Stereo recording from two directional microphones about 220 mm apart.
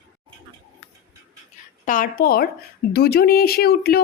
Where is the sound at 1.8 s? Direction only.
40° left (ahead or behind).